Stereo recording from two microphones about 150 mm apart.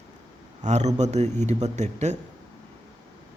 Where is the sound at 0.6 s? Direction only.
50° right (ahead or behind).